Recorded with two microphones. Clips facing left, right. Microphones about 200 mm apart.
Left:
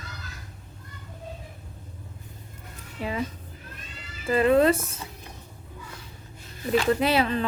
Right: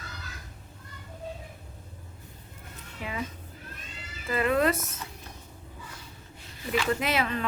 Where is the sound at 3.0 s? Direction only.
35° left (ahead or behind).